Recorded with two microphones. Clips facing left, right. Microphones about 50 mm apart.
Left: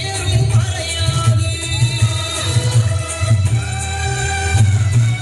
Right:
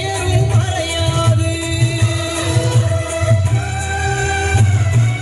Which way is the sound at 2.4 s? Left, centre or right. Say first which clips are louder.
Right 3 dB; right.